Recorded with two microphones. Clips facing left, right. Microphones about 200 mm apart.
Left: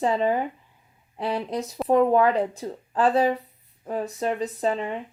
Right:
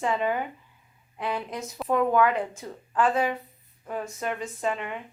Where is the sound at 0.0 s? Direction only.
35° left (ahead or behind).